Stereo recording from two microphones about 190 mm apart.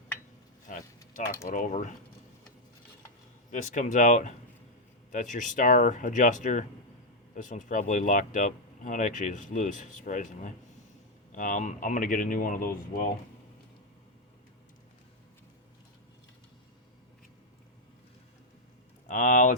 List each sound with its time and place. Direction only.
0.7 s a sound: 45° left (ahead or behind)
1.5 s speech: 40° left (ahead or behind)
3.5 s speech: 40° left (ahead or behind)
19.0 s speech: 40° left (ahead or behind)